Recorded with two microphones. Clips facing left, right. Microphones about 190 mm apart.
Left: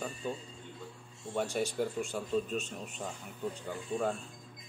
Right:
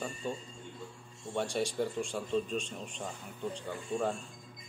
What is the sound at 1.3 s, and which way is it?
Speech, 5° left (ahead or behind).